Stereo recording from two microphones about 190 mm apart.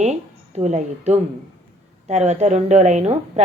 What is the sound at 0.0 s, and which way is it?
Speech, 35° right (ahead or behind).